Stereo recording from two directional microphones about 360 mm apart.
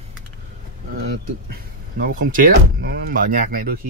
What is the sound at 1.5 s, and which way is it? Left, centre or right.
Speech, right.